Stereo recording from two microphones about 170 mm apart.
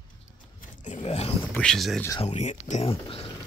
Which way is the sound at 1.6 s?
Centre (ahead or behind).